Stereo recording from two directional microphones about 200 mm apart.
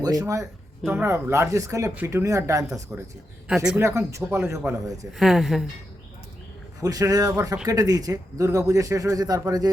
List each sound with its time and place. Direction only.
0.0 s speech: 20° right (ahead or behind)
5.1 s a woman's voice: centre (ahead or behind)
6.8 s speech: 20° right (ahead or behind)